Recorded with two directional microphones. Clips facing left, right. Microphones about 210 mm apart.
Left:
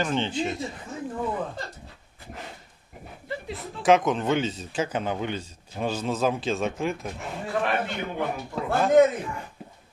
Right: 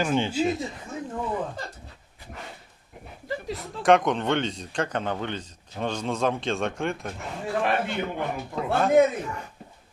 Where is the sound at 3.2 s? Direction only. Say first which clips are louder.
Right 3 dB; 40° right (ahead or behind).